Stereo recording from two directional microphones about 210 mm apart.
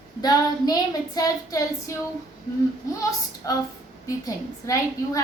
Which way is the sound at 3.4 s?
15° left (ahead or behind).